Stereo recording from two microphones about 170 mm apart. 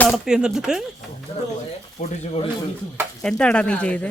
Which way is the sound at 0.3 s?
5° right (ahead or behind).